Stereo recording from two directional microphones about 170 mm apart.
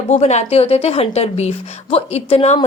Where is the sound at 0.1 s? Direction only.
40° left (ahead or behind).